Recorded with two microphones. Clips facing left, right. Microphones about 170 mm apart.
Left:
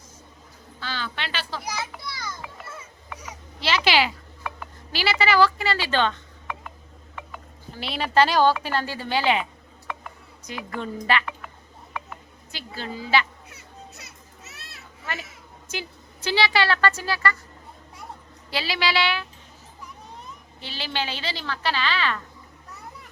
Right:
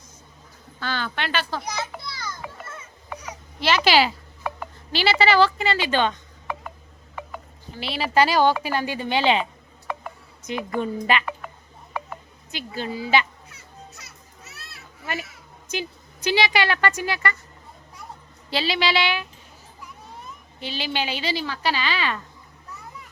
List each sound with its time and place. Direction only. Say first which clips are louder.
0.8 s speech: right 4 dB; 50° right (ahead or behind)
1.6 s children playing: right 1 dB; 5° left (ahead or behind)
2.4 s music: right 2 dB; 5° left (ahead or behind)
3.6 s speech: right 3 dB; 50° right (ahead or behind)
4.9 s a woman's voice: right 3 dB; 25° right (ahead or behind)
7.8 s a woman's voice: even; centre (ahead or behind); by 9.4 s 25° right (ahead or behind)
10.5 s a woman's voice: right 6 dB; 20° right (ahead or behind)
11.1 s music: right 1 dB; 15° right (ahead or behind)
12.5 s a woman's voice: right 4 dB; 15° right (ahead or behind)
15.7 s speech: right 4 dB; 15° right (ahead or behind)
18.5 s a woman's voice: right 2 dB; 25° right (ahead or behind)
20.6 s a woman's voice: right 3 dB; 15° right (ahead or behind)